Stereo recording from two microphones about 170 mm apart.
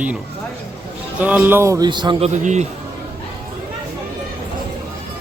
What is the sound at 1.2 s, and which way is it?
Speech, 10° right (ahead or behind).